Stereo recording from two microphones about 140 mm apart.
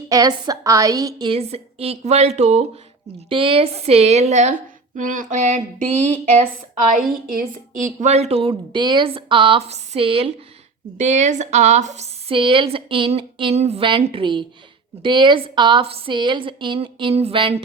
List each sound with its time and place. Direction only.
0.1 s a woman's voice: 25° right (ahead or behind)
1.3 s speech: 45° right (ahead or behind)
3.2 s speech: 40° right (ahead or behind); by 4.5 s 55° right (ahead or behind)
4.9 s a sound: 65° right (ahead or behind)
6.9 s speech: 70° right (ahead or behind); by 10.3 s 40° right (ahead or behind)
10.9 s a woman's voice: 55° right (ahead or behind)